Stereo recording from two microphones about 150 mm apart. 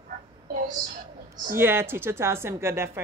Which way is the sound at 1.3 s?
65° right (ahead or behind).